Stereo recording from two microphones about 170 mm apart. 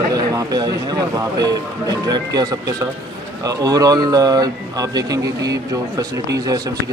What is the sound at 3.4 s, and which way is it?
Speech, 20° right (ahead or behind).